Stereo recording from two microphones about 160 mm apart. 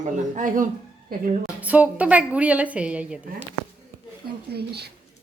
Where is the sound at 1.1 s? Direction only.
70° right (ahead or behind).